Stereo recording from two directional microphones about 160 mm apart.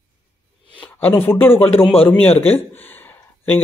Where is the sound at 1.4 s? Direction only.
15° left (ahead or behind).